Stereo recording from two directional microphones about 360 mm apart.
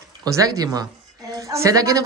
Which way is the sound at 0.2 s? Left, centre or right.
Centre.